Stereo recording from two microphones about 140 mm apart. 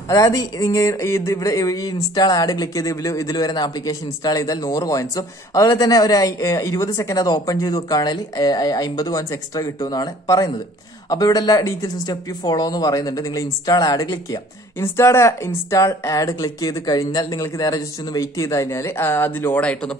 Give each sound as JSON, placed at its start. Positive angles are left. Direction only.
{"t": 0.1, "sound": "speech", "side_deg": 25}